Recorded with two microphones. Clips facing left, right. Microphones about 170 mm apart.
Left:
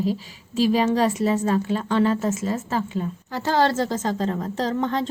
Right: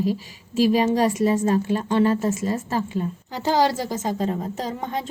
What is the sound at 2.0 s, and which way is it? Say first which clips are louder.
Speech: right 1 dB; 40° right (ahead or behind).